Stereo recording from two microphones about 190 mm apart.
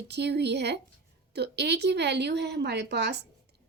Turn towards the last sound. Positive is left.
turn(degrees=-65)  # may be behind; listen again after turning